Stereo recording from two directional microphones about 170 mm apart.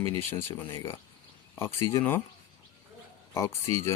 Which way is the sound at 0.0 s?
15° left (ahead or behind).